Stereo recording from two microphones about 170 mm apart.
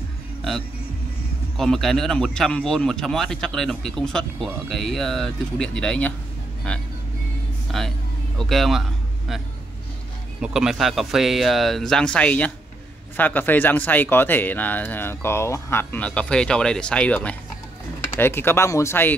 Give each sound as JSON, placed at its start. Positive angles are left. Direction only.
{"t": 1.6, "sound": "speech", "side_deg": 0}
{"t": 10.4, "sound": "speech", "side_deg": -5}